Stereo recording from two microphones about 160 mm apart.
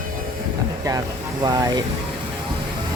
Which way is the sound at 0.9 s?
20° right (ahead or behind).